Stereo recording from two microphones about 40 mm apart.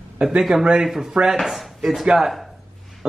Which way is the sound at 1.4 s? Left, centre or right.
Centre.